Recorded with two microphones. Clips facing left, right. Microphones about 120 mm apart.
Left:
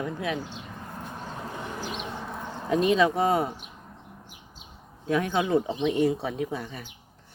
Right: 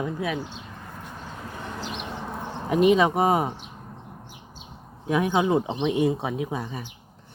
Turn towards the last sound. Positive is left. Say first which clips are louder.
# right 2 dB
turn(degrees=-15)  # may be behind; listen again after turning